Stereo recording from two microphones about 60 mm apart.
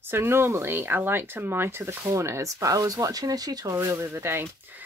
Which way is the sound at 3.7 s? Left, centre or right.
Right.